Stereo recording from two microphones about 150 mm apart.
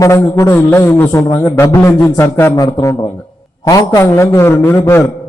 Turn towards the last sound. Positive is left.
turn(degrees=15)  # may be behind; listen again after turning